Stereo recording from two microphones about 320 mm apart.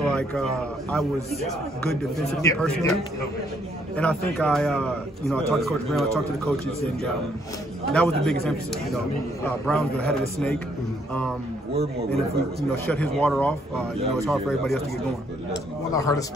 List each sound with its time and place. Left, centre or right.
0.0 s a man's voice: centre
9.4 s a man's voice: centre
11.7 s a man's voice: centre
12.5 s a man's voice: centre
13.9 s speech: centre
14.2 s a man's voice: centre
15.9 s speech: centre